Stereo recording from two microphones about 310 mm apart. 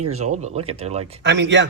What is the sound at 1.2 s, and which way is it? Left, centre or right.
Speech, right.